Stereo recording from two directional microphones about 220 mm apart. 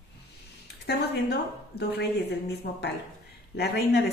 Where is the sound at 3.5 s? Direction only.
50° left (ahead or behind).